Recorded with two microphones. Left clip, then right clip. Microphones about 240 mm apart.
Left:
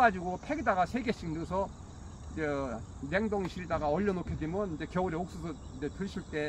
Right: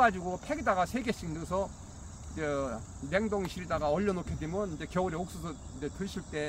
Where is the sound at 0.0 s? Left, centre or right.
Centre.